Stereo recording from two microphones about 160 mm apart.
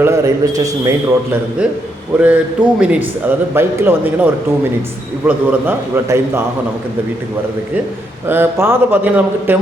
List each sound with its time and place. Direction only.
0.0 s a man's voice: 20° right (ahead or behind)
2.2 s a man's voice: 10° right (ahead or behind)
8.3 s a man's voice: 15° right (ahead or behind)